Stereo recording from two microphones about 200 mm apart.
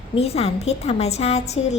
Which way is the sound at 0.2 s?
30° left (ahead or behind).